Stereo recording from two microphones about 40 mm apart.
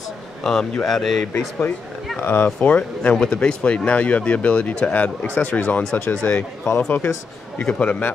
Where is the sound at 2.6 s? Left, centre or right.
Left.